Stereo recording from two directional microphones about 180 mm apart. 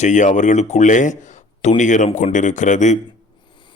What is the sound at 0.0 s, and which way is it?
A man's voice, 45° left (ahead or behind).